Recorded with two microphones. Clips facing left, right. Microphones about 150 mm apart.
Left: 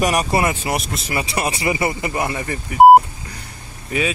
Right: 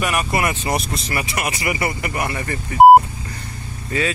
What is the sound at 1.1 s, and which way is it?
Speech, 30° left (ahead or behind).